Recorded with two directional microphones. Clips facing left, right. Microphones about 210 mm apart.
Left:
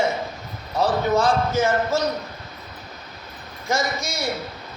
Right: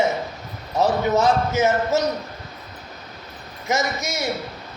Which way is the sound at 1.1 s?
20° right (ahead or behind).